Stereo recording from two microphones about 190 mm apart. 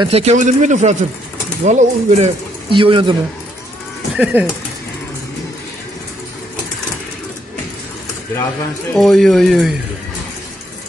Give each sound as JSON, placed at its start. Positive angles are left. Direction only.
{"t": 0.0, "sound": "speech", "side_deg": -35}
{"t": 4.2, "sound": "speech", "side_deg": -10}
{"t": 8.9, "sound": "speech", "side_deg": 0}